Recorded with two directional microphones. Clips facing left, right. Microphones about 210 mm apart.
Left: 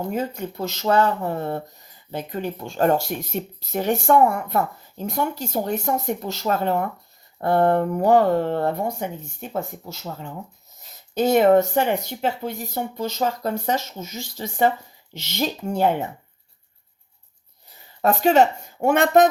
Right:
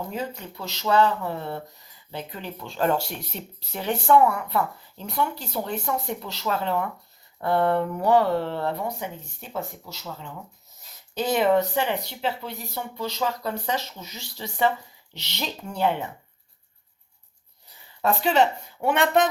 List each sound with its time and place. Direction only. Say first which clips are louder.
0.1 s speech: left 6 dB; 50° left (ahead or behind)
18.0 s speech: left 4 dB; 45° left (ahead or behind)